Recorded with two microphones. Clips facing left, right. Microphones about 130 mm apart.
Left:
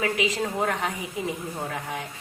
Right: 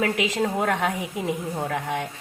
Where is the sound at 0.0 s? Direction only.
65° right (ahead or behind).